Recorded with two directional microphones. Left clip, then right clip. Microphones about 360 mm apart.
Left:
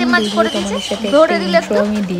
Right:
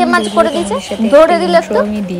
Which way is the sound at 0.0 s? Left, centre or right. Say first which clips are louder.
Right 4 dB; centre.